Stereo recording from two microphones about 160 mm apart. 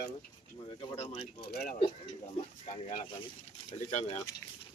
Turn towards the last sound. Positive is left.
turn(degrees=45)  # may be behind; listen again after turning